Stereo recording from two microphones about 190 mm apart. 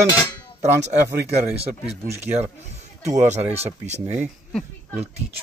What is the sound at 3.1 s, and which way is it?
Speech, 35° right (ahead or behind).